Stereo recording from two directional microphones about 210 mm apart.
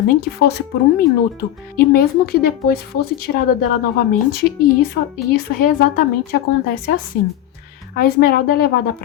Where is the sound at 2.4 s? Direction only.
45° left (ahead or behind).